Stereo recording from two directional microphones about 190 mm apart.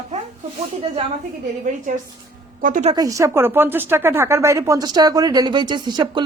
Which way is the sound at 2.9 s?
20° right (ahead or behind).